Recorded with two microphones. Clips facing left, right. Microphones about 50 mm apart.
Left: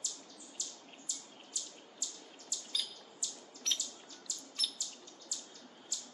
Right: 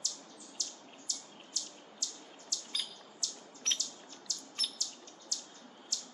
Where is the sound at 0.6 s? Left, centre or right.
Centre.